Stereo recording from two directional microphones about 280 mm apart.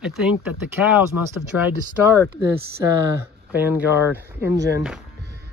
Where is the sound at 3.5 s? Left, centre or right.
Centre.